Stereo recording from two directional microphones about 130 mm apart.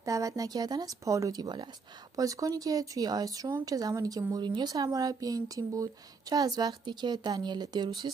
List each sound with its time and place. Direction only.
0.0 s a woman's voice: 25° right (ahead or behind)